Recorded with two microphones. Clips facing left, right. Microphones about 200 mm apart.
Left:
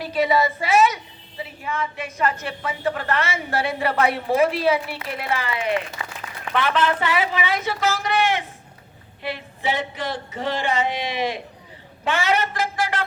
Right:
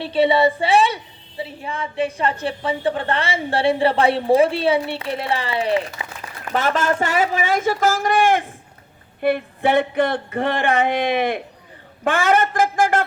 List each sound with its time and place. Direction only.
0.0 s a woman's voice: 30° right (ahead or behind)
6.5 s speech: 45° right (ahead or behind)